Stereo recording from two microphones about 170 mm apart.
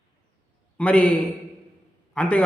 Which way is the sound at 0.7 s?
10° left (ahead or behind).